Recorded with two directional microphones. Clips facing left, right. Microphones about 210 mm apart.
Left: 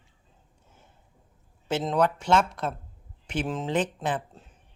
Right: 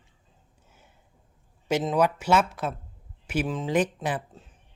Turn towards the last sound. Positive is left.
turn(degrees=-10)  # may be behind; listen again after turning